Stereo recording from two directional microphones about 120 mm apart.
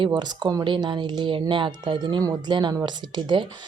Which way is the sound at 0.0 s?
40° right (ahead or behind).